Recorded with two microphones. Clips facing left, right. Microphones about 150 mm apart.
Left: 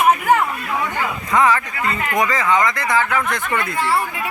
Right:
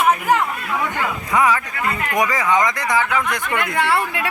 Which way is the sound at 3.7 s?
70° right (ahead or behind).